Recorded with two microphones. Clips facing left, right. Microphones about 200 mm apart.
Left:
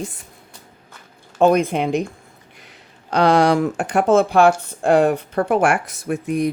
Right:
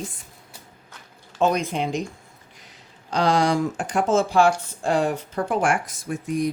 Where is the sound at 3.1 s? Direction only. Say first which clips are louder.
Left 5 dB; 60° left (ahead or behind).